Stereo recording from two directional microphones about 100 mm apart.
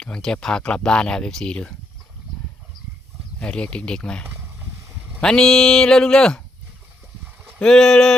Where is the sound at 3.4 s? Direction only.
10° left (ahead or behind).